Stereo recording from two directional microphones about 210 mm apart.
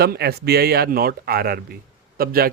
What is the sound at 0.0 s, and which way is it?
Speech, 50° right (ahead or behind).